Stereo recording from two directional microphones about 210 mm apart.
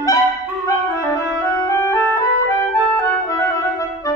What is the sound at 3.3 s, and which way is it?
Clarinet, 15° left (ahead or behind).